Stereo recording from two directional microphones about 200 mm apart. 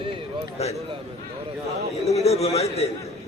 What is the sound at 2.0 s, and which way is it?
Speech, 30° left (ahead or behind).